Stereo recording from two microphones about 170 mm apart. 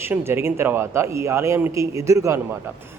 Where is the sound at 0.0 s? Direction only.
15° right (ahead or behind).